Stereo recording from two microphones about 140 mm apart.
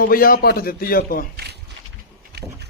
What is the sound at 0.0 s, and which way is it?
A man's voice, 90° left.